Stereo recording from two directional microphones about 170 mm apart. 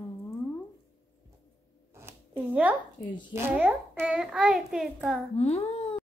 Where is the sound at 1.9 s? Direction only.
15° right (ahead or behind).